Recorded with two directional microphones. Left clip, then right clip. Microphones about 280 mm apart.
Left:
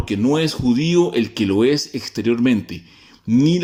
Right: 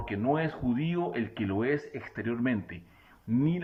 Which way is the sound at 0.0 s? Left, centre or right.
Left.